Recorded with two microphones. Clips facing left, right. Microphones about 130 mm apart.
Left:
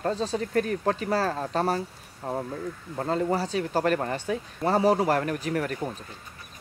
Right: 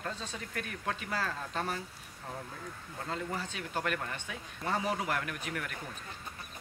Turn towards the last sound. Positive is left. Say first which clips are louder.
# left 11 dB
turn(degrees=40)  # may be behind; listen again after turning